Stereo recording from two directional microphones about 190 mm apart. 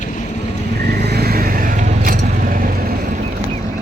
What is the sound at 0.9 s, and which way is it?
Vehicle, 60° right (ahead or behind).